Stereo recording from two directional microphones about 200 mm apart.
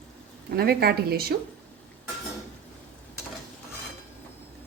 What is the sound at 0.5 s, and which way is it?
Speech, 50° right (ahead or behind).